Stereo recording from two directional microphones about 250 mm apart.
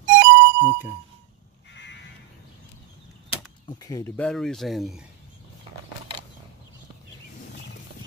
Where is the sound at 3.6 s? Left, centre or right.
Centre.